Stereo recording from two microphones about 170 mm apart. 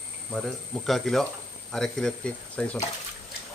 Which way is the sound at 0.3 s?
Centre (ahead or behind).